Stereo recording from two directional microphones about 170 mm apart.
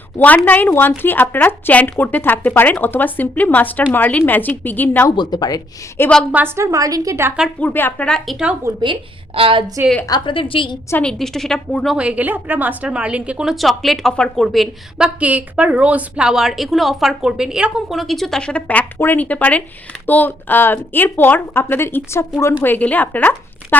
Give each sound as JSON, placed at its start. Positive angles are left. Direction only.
{"t": 0.2, "sound": "a woman's voice", "side_deg": 10}
{"t": 5.1, "sound": "speech", "side_deg": 25}
{"t": 6.3, "sound": "a woman's voice", "side_deg": -15}
{"t": 7.6, "sound": "a woman's voice", "side_deg": 10}
{"t": 8.8, "sound": "a woman's voice", "side_deg": -30}
{"t": 10.1, "sound": "speech", "side_deg": 30}
{"t": 10.8, "sound": "a woman's voice", "side_deg": 10}